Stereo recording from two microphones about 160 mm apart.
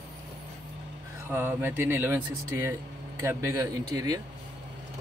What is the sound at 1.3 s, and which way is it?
Speech, 15° right (ahead or behind).